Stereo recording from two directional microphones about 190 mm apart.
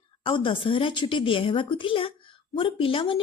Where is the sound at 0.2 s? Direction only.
25° left (ahead or behind).